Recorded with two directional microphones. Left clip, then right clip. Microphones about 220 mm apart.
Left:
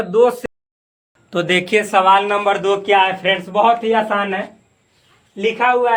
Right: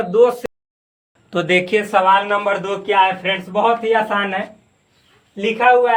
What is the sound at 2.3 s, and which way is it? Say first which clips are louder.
A man's voice: left 3 dB; 45° left (ahead or behind).